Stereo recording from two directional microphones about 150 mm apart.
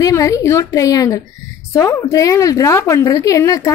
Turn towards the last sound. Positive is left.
turn(degrees=20)  # may be behind; listen again after turning